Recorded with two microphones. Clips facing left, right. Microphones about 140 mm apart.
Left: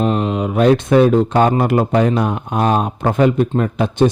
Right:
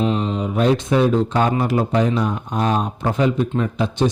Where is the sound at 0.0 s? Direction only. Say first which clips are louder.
Left 3 dB; 55° left (ahead or behind).